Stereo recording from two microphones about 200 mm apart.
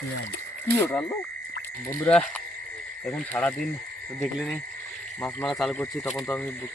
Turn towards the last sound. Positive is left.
turn(degrees=0)  # may be behind; listen again after turning